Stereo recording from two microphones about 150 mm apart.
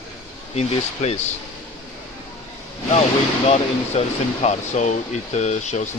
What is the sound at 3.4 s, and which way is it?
Speech, 45° left (ahead or behind).